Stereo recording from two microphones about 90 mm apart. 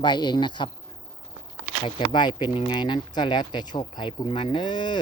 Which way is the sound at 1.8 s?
55° left (ahead or behind).